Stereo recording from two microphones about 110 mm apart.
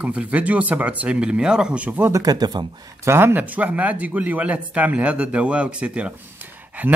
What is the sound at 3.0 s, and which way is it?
Speech, 20° right (ahead or behind).